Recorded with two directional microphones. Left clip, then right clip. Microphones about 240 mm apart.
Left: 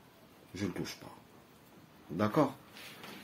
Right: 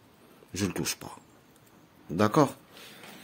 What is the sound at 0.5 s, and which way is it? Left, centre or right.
Speech, right.